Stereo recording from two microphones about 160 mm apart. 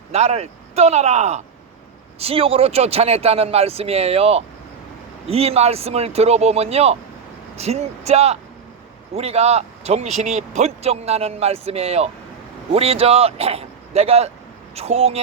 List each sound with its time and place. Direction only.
0.1 s speech: 40° right (ahead or behind)